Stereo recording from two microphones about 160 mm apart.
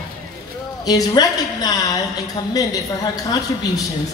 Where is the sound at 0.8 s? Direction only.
25° left (ahead or behind).